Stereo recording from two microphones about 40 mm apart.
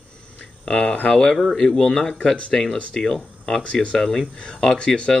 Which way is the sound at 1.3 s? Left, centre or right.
Centre.